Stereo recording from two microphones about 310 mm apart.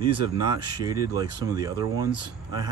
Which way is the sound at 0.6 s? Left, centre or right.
Centre.